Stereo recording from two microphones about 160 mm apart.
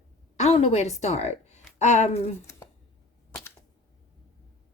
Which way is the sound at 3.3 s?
10° left (ahead or behind).